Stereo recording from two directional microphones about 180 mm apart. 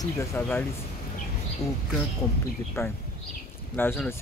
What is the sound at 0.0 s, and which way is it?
Speech, 15° left (ahead or behind).